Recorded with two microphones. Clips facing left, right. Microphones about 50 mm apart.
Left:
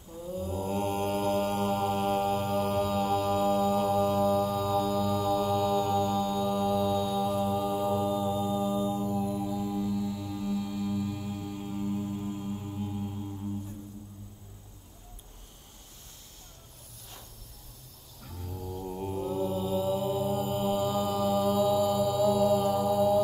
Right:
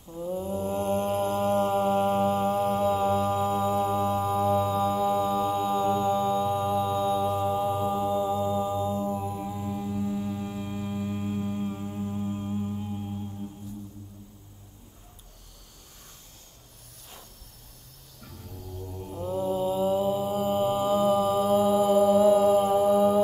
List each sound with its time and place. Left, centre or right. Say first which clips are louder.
0.1 s mantra: right 4 dB; right
12.6 s music: right 2 dB; centre
18.3 s mantra: left 4 dB; left
19.2 s mantra: right 5 dB; right